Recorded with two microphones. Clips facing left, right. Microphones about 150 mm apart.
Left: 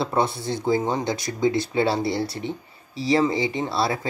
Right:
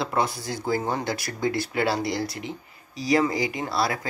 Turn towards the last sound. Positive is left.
turn(degrees=25)  # may be behind; listen again after turning